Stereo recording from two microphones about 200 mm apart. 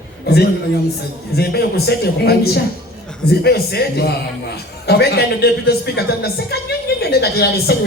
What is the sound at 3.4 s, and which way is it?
Speech, 55° left (ahead or behind).